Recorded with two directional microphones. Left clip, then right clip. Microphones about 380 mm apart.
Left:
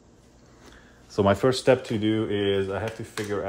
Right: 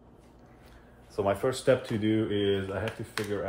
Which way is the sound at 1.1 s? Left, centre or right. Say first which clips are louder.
Left 6 dB; left.